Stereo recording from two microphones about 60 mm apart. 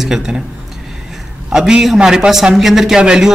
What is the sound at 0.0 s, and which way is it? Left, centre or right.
Speech, centre.